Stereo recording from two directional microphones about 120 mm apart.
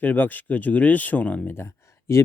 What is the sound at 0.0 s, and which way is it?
Speech, 15° left (ahead or behind).